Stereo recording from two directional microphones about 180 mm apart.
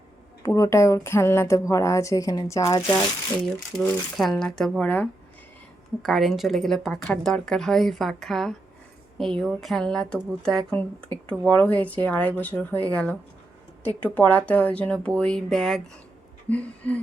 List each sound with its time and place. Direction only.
0.4 s speech: 20° left (ahead or behind)
3.8 s a woman's voice: centre (ahead or behind)